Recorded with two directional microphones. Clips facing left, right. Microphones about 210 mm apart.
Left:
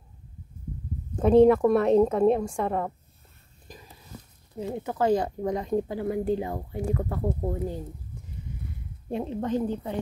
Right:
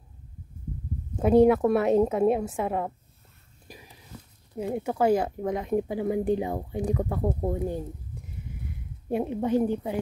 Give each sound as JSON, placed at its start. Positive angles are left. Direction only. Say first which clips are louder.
{"t": 1.2, "sound": "a woman's voice", "louder": "left 1 dB", "side_deg": -5}
{"t": 3.6, "sound": "whispering", "louder": "even", "side_deg": -10}
{"t": 4.7, "sound": "speech", "louder": "right 1 dB", "side_deg": -10}
{"t": 9.1, "sound": "speech", "louder": "right 3 dB", "side_deg": -10}